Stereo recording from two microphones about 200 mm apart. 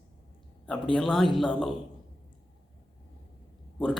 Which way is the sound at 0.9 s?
Centre (ahead or behind).